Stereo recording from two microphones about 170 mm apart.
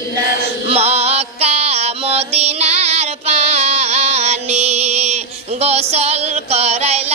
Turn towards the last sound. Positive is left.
turn(degrees=-40)  # may be behind; listen again after turning